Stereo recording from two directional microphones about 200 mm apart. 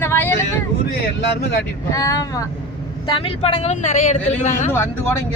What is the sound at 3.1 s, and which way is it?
Speech, 30° left (ahead or behind).